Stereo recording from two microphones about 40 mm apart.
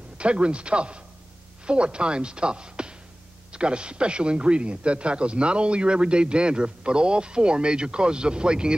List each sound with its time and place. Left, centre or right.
0.2 s speech: right